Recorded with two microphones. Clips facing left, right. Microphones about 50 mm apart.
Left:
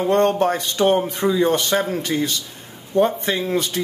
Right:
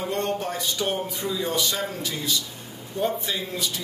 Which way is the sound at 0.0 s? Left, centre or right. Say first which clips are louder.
Left 10 dB; left.